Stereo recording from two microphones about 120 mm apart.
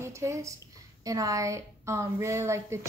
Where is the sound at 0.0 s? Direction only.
25° right (ahead or behind).